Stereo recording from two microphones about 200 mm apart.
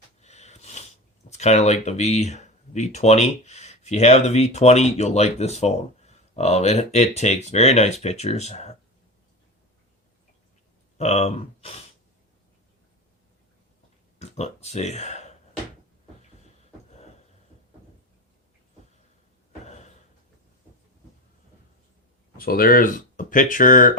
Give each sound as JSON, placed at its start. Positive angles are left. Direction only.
{"t": 0.2, "sound": "sniff", "side_deg": 35}
{"t": 1.3, "sound": "speech", "side_deg": 35}
{"t": 10.9, "sound": "speech", "side_deg": 30}
{"t": 14.2, "sound": "speech", "side_deg": 35}
{"t": 19.6, "sound": "a sound", "side_deg": 35}
{"t": 22.4, "sound": "speech", "side_deg": 45}